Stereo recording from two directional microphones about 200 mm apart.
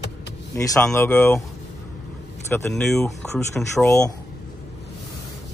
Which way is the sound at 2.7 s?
Centre (ahead or behind).